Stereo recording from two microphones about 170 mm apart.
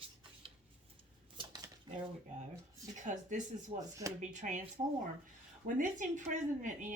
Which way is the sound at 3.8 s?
20° right (ahead or behind).